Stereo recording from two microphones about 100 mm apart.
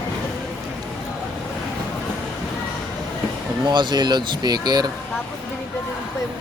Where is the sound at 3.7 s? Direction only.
50° right (ahead or behind).